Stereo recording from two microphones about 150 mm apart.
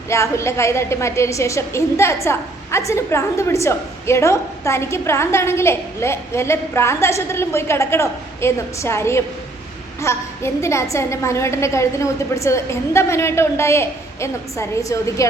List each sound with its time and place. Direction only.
0.1 s a woman's voice: 20° left (ahead or behind)